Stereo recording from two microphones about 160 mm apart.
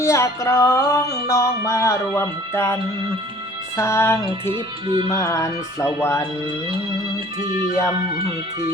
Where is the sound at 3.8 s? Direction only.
15° left (ahead or behind).